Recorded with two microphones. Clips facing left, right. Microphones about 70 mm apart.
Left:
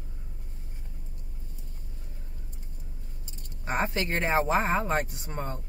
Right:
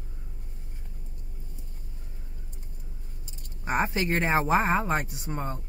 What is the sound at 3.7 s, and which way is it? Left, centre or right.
Speech, centre.